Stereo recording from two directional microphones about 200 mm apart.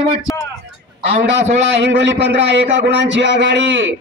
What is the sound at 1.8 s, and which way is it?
A man's voice, 65° right (ahead or behind).